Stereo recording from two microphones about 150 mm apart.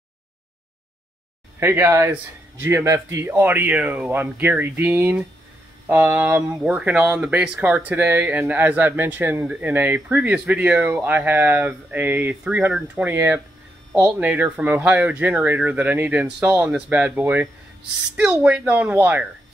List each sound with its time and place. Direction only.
1.6 s speech: 15° right (ahead or behind)
6.6 s speech: 5° right (ahead or behind)